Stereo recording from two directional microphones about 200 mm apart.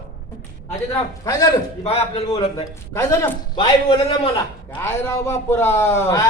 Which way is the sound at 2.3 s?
15° left (ahead or behind).